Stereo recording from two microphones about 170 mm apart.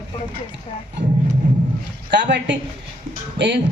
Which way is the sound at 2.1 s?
90° right.